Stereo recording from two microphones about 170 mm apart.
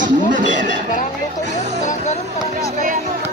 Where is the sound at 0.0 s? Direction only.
50° right (ahead or behind).